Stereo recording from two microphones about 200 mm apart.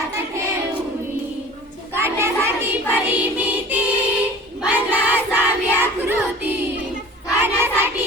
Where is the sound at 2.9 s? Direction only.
10° right (ahead or behind).